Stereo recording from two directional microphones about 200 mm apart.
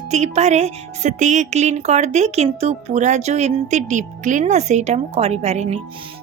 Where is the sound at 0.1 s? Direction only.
35° right (ahead or behind).